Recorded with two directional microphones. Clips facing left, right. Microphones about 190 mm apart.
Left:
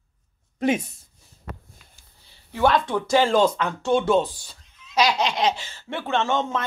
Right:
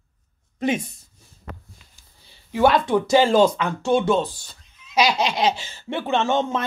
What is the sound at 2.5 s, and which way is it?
Speech, 10° right (ahead or behind).